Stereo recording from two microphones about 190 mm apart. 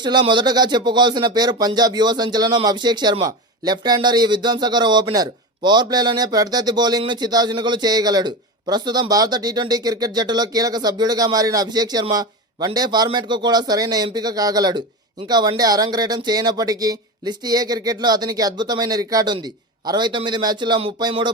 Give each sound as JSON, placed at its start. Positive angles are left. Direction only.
{"t": 0.0, "sound": "speech", "side_deg": -25}